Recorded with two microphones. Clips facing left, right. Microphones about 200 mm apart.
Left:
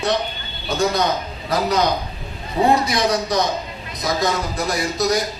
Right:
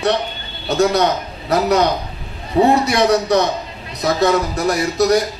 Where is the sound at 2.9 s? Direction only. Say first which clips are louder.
Right 5 dB; 65° right (ahead or behind).